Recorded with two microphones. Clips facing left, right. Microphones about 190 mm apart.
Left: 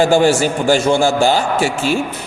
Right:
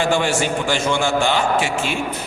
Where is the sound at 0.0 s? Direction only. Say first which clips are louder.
Left 7 dB; 40° left (ahead or behind).